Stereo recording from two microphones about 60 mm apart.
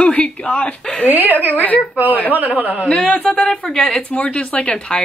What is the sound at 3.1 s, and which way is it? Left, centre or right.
Speech, left.